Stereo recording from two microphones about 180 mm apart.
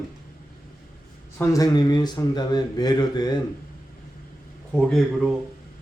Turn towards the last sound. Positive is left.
turn(degrees=0)  # may be behind; listen again after turning